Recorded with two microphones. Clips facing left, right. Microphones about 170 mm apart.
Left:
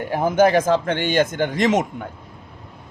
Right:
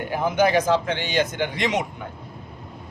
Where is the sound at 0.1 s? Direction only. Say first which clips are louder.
Left 4 dB; 45° left (ahead or behind).